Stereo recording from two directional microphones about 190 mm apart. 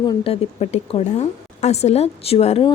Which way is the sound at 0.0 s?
30° left (ahead or behind).